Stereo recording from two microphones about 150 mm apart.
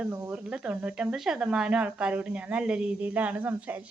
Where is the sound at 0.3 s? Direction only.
5° right (ahead or behind).